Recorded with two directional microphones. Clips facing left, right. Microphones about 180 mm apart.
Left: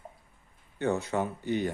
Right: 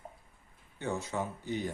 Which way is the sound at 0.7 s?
65° left (ahead or behind).